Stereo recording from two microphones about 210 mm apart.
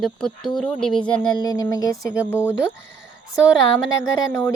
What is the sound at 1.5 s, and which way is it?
Speech, 20° left (ahead or behind).